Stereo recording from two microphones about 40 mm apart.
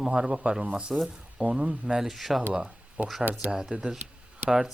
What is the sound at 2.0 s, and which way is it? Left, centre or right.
Speech, centre.